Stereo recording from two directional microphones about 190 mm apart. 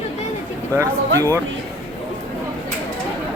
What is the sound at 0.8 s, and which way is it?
Speech, 15° right (ahead or behind).